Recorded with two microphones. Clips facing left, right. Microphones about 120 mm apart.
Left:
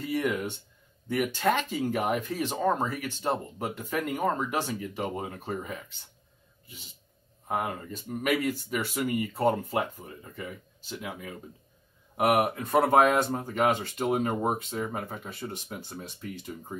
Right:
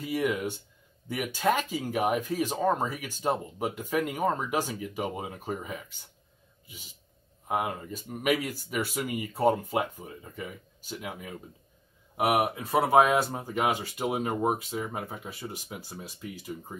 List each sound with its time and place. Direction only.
0.0 s speech: 10° right (ahead or behind)
7.4 s speech: 10° right (ahead or behind)
12.2 s speech: 5° right (ahead or behind)